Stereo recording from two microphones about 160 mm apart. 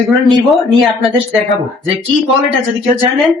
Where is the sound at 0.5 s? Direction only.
Centre (ahead or behind).